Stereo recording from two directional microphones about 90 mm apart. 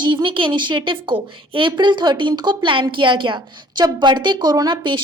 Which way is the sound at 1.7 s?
60° right (ahead or behind).